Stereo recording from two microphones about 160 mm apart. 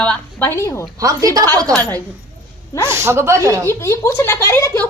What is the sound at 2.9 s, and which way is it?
Speech, 15° right (ahead or behind).